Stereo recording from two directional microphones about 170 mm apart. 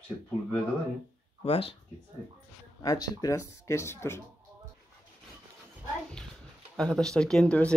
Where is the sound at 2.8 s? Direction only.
20° left (ahead or behind).